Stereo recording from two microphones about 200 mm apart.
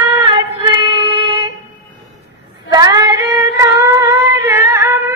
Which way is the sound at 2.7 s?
20° right (ahead or behind).